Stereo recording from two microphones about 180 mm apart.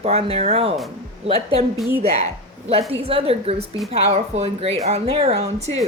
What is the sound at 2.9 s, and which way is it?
Speech, 30° right (ahead or behind).